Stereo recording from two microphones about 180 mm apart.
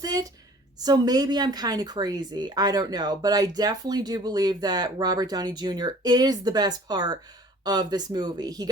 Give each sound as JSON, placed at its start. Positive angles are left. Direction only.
{"t": 0.0, "sound": "a woman's voice", "side_deg": -20}